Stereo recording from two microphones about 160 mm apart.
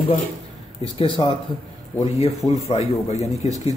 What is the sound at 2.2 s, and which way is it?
Speech, 40° left (ahead or behind).